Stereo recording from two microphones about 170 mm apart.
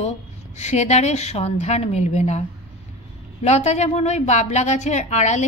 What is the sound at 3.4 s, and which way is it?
A woman's voice, 40° left (ahead or behind).